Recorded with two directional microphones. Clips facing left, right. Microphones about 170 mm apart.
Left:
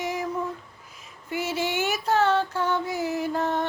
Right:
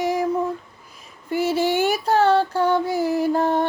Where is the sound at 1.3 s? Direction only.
35° right (ahead or behind).